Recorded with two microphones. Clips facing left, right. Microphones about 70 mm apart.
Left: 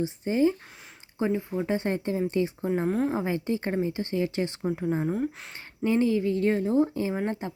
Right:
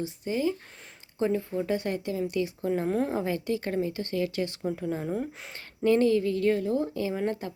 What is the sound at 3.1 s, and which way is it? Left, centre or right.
Speech, left.